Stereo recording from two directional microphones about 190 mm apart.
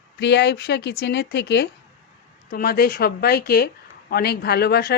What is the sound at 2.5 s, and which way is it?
A woman's voice, 50° left (ahead or behind).